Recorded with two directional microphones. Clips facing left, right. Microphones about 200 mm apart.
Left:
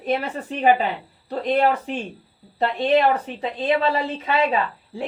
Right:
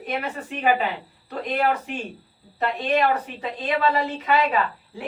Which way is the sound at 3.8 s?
30° left (ahead or behind).